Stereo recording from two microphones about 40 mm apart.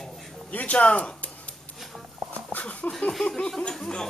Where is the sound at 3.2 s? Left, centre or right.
Centre.